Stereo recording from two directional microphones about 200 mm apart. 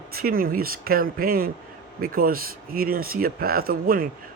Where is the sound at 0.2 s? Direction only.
45° right (ahead or behind).